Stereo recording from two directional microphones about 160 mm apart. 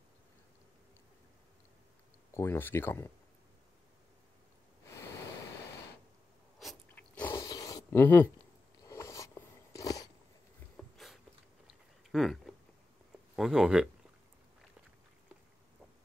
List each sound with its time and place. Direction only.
2.3 s speech: 15° left (ahead or behind)
6.6 s biting: 5° left (ahead or behind)
7.4 s a sound: 25° left (ahead or behind)
8.8 s biting: 20° left (ahead or behind)
10.8 s a sound: centre (ahead or behind)
11.6 s chewing: centre (ahead or behind)
13.4 s speech: 5° right (ahead or behind)